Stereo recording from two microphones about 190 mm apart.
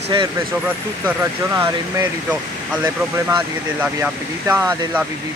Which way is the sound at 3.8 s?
10° right (ahead or behind).